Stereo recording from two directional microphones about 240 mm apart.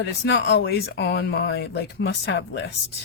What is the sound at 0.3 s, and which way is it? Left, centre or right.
Speech, left.